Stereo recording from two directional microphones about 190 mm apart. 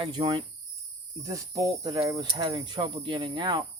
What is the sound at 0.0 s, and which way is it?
Speech, 25° right (ahead or behind).